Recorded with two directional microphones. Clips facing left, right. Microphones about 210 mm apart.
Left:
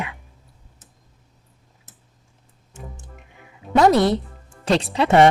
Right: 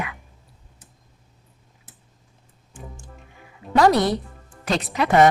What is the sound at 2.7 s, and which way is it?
Music, 20° left (ahead or behind).